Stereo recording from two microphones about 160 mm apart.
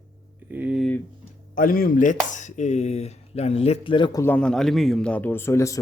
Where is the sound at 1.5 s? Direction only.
60° left (ahead or behind); by 4.2 s 30° left (ahead or behind).